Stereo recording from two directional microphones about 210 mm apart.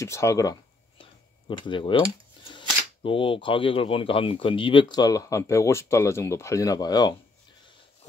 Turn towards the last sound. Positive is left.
turn(degrees=20)  # may be behind; listen again after turning